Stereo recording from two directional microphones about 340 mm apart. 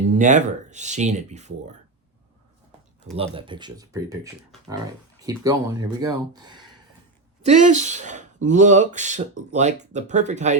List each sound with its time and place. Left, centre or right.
0.1 s speech: right
3.1 s speech: centre